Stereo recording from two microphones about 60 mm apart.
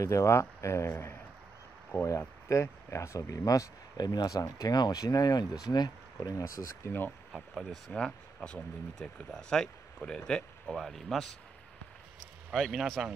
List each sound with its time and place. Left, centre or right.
0.0 s speech: left
2.1 s speech: left
6.1 s speech: left
6.8 s speech: left
7.3 s speech: centre
7.9 s speech: centre
12.5 s speech: centre